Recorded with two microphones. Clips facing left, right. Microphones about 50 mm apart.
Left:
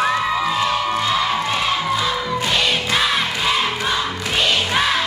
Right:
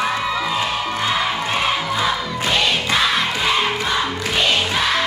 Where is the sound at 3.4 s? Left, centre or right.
Centre.